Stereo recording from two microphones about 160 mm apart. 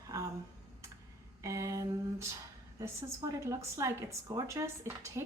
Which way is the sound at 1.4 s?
20° right (ahead or behind).